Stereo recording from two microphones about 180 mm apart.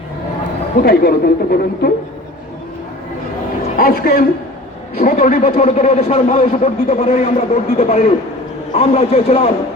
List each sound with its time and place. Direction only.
0.8 s speech: 60° left (ahead or behind)
3.8 s a man's voice: 55° left (ahead or behind)
5.2 s a man's voice: 45° left (ahead or behind)